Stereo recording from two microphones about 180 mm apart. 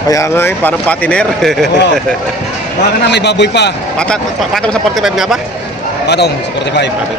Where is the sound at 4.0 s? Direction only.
5° left (ahead or behind).